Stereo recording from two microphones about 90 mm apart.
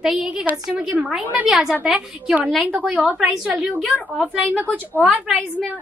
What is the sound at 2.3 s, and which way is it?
A woman's voice, 20° right (ahead or behind).